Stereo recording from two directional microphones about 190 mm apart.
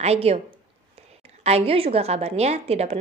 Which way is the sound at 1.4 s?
30° right (ahead or behind).